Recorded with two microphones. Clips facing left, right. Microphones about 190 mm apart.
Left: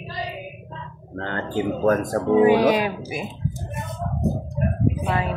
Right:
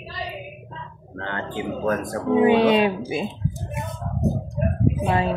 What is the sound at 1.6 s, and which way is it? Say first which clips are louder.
Music: left 5 dB; 45° left (ahead or behind).